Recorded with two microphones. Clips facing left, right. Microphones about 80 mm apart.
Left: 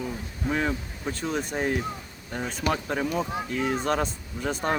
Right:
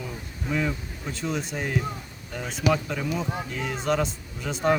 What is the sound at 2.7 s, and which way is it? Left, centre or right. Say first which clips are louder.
Speech: right 1 dB; left.